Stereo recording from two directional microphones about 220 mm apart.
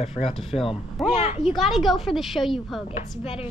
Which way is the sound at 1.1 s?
30° left (ahead or behind).